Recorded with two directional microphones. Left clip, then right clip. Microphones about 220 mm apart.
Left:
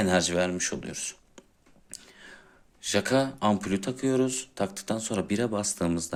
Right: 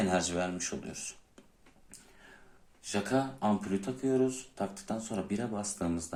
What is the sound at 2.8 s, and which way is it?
Speech, 40° left (ahead or behind).